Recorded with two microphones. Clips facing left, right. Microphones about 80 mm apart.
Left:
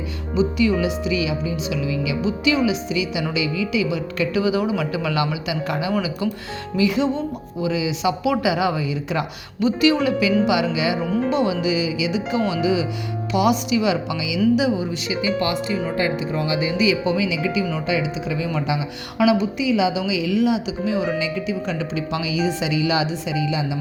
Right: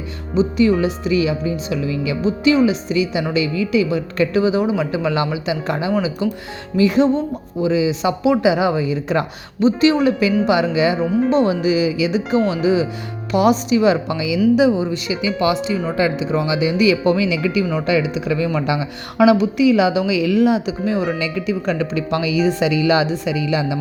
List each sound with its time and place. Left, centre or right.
0.3 s a woman's voice: right
6.7 s a woman's voice: right
16.3 s speech: right
21.1 s speech: right
23.3 s speech: right